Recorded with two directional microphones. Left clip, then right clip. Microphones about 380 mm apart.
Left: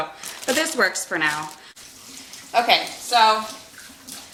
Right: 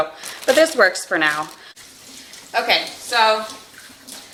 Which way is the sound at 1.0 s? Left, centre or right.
Left.